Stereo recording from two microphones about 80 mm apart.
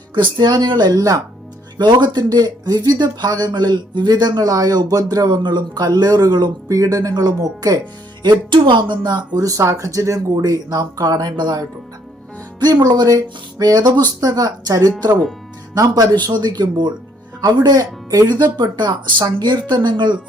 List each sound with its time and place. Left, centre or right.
0.1 s speech: right
0.9 s speech: right
1.8 s speech: right
8.2 s speech: right
16.2 s speech: right
18.5 s speech: right